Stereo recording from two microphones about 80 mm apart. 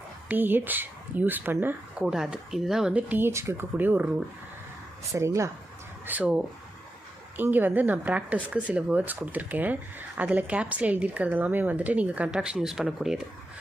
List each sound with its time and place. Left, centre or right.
0.3 s speech: right
2.0 s speech: centre
2.9 s speech: centre
3.2 s speech: right
5.1 s speech: right
6.1 s speech: centre